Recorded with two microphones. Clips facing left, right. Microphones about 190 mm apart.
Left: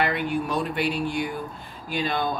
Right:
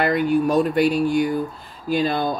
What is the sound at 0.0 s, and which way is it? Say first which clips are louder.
Speech: right 7 dB; 40° right (ahead or behind).